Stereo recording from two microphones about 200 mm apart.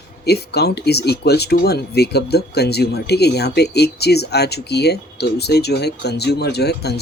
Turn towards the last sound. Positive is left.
turn(degrees=55)  # may be behind; listen again after turning